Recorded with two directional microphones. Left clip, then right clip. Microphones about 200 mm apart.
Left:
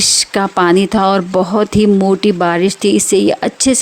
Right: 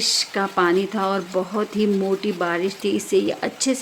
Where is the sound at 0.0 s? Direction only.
45° left (ahead or behind).